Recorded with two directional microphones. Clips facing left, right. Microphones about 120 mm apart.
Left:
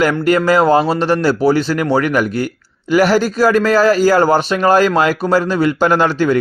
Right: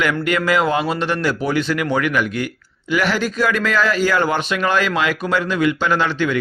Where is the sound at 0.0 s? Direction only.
35° left (ahead or behind).